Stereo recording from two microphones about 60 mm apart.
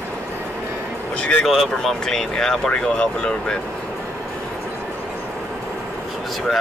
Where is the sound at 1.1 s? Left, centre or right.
Left.